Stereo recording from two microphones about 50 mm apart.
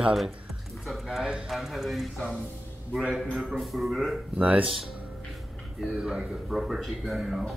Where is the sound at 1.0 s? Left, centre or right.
Centre.